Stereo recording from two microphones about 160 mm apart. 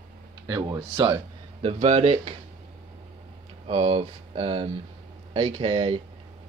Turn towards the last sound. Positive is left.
turn(degrees=-35)  # may be behind; listen again after turning